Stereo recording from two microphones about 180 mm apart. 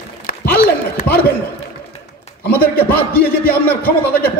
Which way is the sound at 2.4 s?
55° left (ahead or behind).